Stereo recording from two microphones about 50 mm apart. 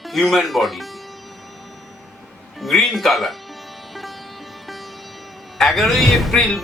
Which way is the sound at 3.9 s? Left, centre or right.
Centre.